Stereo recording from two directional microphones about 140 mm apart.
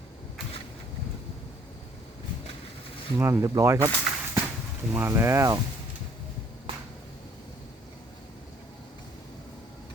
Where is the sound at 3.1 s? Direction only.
20° right (ahead or behind).